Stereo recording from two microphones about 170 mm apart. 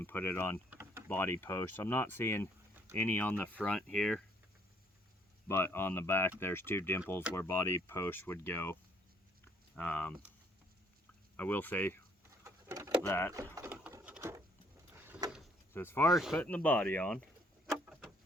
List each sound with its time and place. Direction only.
0.0 s speech: 10° left (ahead or behind)
0.7 s vehicle: 15° right (ahead or behind)
1.0 s speech: 10° left (ahead or behind)
5.5 s speech: 15° left (ahead or behind)
9.4 s a sound: 10° left (ahead or behind)
11.3 s speech: 10° left (ahead or behind)
12.4 s pigeon: 20° right (ahead or behind)
13.0 s speech: 15° left (ahead or behind)
13.6 s a sound: 5° right (ahead or behind)
14.0 s patter: 5° right (ahead or behind)
15.7 s speech: 15° left (ahead or behind)